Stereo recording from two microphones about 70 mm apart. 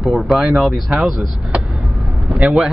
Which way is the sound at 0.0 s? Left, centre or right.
Centre.